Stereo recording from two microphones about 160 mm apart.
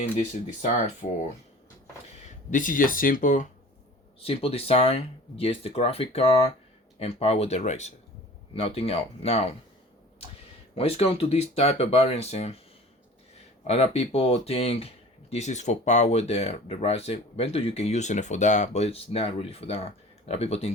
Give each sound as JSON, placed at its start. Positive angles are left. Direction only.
{"t": 0.0, "sound": "speech", "side_deg": 50}
{"t": 2.5, "sound": "speech", "side_deg": 55}
{"t": 4.2, "sound": "speech", "side_deg": 35}
{"t": 10.8, "sound": "speech", "side_deg": 40}
{"t": 13.7, "sound": "speech", "side_deg": 40}